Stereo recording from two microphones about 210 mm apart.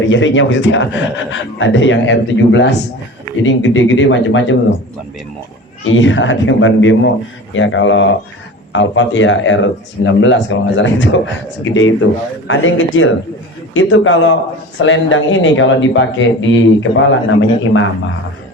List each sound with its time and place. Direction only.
0.1 s speech: 65° left (ahead or behind)
5.8 s speech: 65° left (ahead or behind)